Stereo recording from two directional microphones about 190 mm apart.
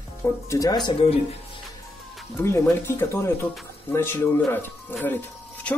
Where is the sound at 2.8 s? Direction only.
15° left (ahead or behind).